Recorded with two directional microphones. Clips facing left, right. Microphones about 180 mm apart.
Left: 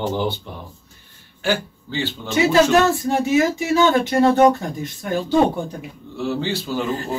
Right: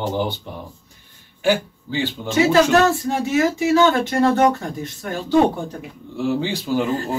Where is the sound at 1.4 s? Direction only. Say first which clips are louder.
Right 3 dB; 10° right (ahead or behind).